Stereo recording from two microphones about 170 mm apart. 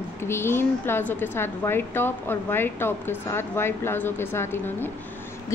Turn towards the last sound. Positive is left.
turn(degrees=15)  # may be behind; listen again after turning